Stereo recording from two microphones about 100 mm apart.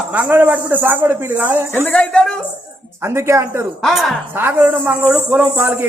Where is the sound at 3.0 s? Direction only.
25° right (ahead or behind).